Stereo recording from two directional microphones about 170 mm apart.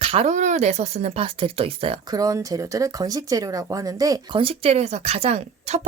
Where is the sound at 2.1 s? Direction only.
20° right (ahead or behind).